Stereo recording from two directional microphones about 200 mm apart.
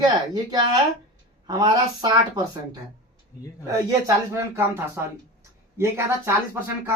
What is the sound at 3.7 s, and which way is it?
Speech, 15° right (ahead or behind).